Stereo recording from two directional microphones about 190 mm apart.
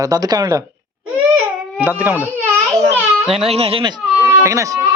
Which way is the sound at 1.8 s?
10° right (ahead or behind).